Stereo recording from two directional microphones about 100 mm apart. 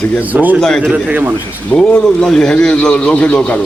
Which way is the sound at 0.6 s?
5° left (ahead or behind).